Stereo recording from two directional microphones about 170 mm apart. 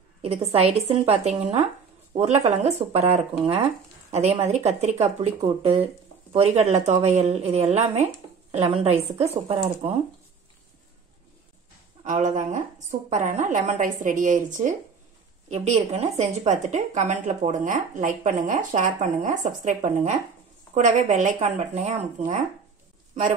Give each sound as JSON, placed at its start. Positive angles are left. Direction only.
{"t": 0.2, "sound": "a woman's voice", "side_deg": -35}
{"t": 12.0, "sound": "a woman's voice", "side_deg": -45}